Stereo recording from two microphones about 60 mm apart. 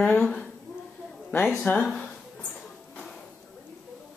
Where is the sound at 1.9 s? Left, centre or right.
Centre.